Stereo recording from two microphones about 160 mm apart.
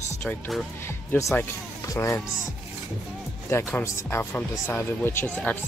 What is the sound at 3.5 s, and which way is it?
Speech, 15° left (ahead or behind).